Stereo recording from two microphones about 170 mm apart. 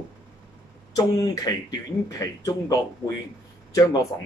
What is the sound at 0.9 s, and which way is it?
Speech, 20° left (ahead or behind).